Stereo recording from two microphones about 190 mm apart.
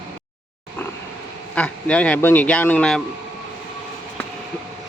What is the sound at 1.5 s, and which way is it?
Speech, 5° left (ahead or behind).